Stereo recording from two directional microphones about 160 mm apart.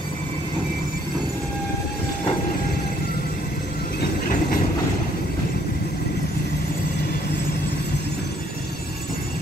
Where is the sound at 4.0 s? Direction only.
60° left (ahead or behind).